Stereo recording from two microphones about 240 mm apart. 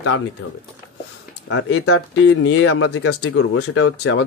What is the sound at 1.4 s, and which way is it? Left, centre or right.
Speech, left.